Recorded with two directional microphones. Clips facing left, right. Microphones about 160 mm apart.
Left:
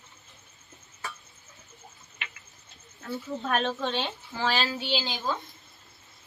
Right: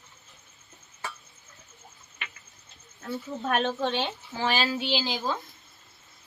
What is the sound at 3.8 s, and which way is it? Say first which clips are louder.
Speech: right 2 dB; 5° right (ahead or behind).